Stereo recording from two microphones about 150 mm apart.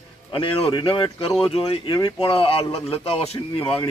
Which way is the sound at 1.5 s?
35° left (ahead or behind).